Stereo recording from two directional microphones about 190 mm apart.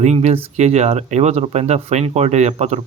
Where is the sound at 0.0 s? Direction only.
35° right (ahead or behind).